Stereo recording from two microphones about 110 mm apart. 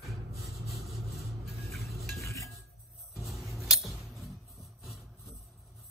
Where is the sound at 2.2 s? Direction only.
30° left (ahead or behind).